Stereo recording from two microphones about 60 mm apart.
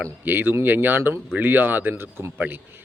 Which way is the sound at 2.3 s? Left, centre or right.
Right.